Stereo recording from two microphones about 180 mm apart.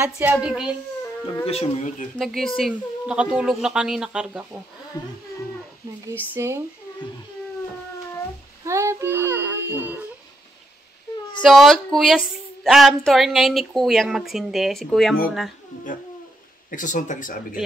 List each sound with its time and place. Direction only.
0.0 s a child's voice: 10° right (ahead or behind)
1.4 s speech: 35° left (ahead or behind)
2.1 s a woman's voice: centre (ahead or behind)
6.1 s a child's voice: 15° right (ahead or behind)
8.6 s child singing: 15° right (ahead or behind)
11.4 s a woman's voice: centre (ahead or behind)
16.7 s speech: 45° left (ahead or behind)